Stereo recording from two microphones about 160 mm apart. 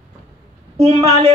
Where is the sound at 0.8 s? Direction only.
40° right (ahead or behind).